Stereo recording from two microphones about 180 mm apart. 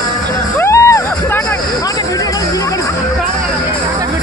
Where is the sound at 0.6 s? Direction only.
15° left (ahead or behind).